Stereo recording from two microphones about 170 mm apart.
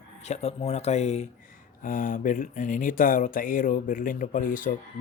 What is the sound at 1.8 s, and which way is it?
Speech, 50° left (ahead or behind).